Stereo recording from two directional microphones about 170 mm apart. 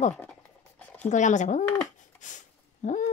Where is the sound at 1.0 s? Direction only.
45° left (ahead or behind).